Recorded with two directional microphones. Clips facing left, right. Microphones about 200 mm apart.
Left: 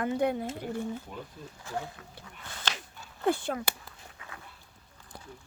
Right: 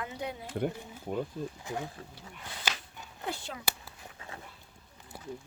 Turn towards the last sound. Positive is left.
turn(degrees=55)  # may be behind; listen again after turning